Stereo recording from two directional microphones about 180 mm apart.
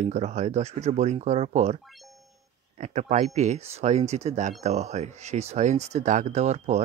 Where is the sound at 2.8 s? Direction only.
40° right (ahead or behind).